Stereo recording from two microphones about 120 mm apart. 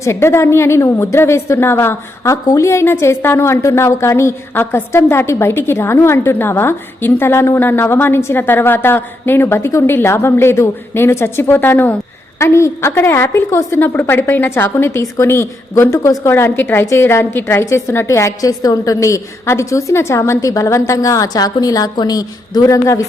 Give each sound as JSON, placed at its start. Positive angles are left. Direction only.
{"t": 0.0, "sound": "a woman's voice", "side_deg": 20}